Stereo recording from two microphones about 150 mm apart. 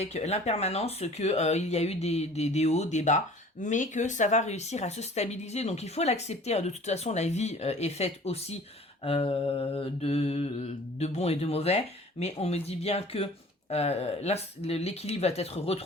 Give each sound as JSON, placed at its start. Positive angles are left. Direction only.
{"t": 0.0, "sound": "mantra", "side_deg": 45}